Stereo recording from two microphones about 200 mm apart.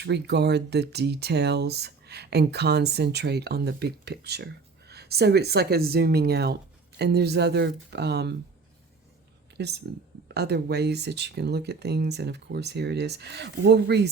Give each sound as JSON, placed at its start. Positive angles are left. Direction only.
{"t": 0.0, "sound": "speech", "side_deg": -60}
{"t": 9.6, "sound": "speech", "side_deg": -55}